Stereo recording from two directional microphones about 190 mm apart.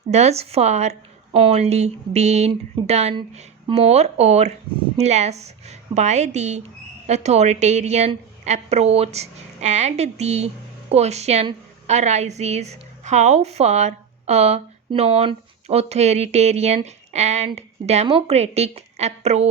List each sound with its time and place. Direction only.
0.1 s a woman's voice: 35° right (ahead or behind)